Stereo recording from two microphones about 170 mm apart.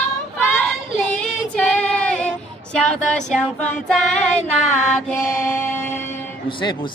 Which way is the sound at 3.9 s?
5° left (ahead or behind).